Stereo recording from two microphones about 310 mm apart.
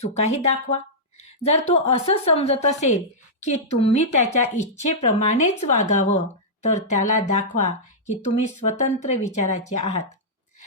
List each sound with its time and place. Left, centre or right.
0.0 s speech: left